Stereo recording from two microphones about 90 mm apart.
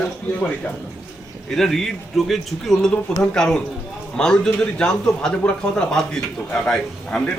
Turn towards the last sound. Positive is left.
turn(degrees=5)  # may be behind; listen again after turning